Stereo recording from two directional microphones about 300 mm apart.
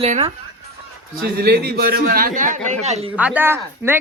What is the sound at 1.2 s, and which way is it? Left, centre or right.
A man's voice, right.